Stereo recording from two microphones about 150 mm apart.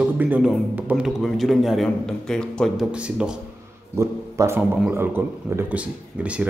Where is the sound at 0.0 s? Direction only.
10° right (ahead or behind).